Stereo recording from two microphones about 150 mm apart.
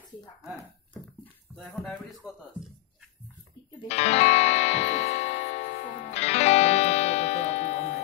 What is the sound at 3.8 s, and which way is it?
Music, 45° left (ahead or behind).